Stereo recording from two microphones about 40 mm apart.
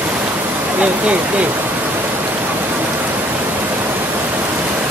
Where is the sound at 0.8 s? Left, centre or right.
Right.